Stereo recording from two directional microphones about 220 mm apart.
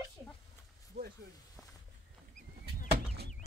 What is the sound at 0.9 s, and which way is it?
Snake, 45° right (ahead or behind).